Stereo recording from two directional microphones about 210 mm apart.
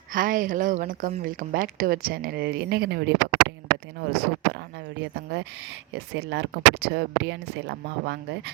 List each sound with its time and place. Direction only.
0.1 s a woman's voice: 40° right (ahead or behind)